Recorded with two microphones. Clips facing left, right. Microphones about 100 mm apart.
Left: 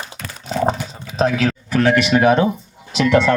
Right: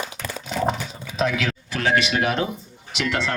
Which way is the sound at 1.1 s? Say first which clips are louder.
Left 6 dB; 35° left (ahead or behind).